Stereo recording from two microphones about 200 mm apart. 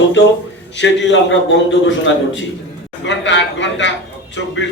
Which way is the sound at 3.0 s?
65° left (ahead or behind).